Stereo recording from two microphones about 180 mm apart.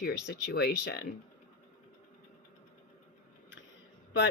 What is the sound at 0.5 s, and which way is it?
Speech, 60° left (ahead or behind).